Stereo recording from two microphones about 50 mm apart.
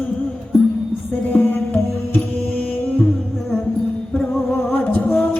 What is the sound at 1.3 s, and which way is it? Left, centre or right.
Music, left.